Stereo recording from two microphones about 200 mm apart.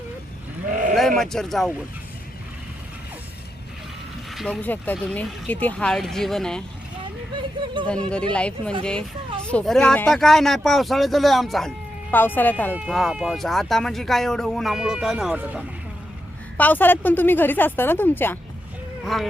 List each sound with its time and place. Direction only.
0.7 s sheep: 40° right (ahead or behind)
0.9 s speech: centre (ahead or behind)
4.4 s speech: centre (ahead or behind)
7.9 s a woman's voice: 5° left (ahead or behind)
12.7 s speech: 5° right (ahead or behind)
16.6 s a woman's voice: 10° left (ahead or behind)